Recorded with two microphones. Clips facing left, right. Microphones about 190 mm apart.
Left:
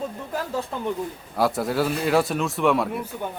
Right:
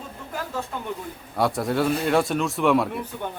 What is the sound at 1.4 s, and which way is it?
A man's voice, centre (ahead or behind).